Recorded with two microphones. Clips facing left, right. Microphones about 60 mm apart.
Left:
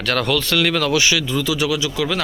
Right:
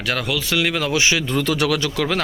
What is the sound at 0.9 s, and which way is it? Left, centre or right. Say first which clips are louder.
Speech: left 1 dB; right.